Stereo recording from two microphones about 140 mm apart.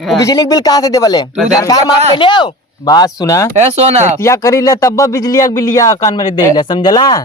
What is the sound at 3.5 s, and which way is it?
Speech, 50° right (ahead or behind).